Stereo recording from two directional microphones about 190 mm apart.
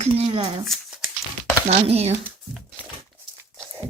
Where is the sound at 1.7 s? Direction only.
35° right (ahead or behind).